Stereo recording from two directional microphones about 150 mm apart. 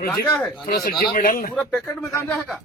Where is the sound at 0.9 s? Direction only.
70° left (ahead or behind).